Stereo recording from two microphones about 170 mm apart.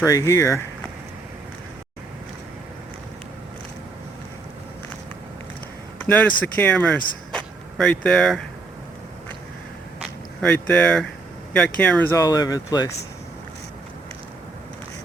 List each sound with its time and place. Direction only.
0.0 s speech: 20° left (ahead or behind)
6.1 s speech: 10° left (ahead or behind)
10.0 s a sound: 5° left (ahead or behind)
11.5 s speech: 5° left (ahead or behind); by 12.9 s 20° left (ahead or behind)